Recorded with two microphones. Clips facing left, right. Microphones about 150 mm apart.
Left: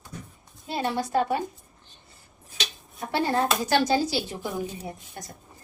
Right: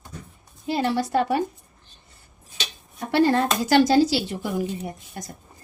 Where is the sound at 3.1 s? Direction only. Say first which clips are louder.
Right 5 dB; 85° right.